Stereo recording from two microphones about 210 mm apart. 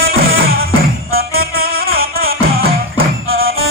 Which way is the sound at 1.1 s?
45° right (ahead or behind).